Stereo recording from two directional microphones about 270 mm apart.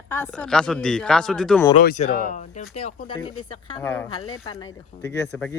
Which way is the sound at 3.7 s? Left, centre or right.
Centre.